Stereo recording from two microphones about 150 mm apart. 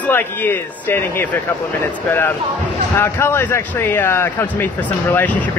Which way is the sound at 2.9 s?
15° left (ahead or behind).